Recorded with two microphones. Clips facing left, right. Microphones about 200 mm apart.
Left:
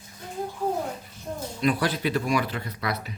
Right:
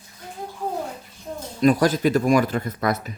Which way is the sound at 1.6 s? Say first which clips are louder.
Right 7 dB; 45° right (ahead or behind).